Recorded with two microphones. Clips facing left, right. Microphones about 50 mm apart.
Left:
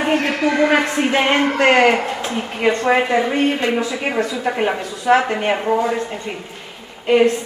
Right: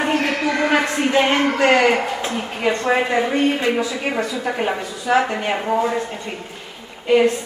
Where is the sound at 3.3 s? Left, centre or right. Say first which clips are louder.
Even; left.